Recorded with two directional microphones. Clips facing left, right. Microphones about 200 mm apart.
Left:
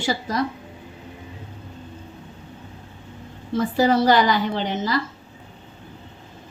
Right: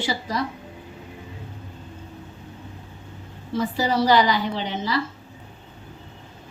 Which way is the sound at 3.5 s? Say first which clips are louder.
Left 4 dB; 50° left (ahead or behind).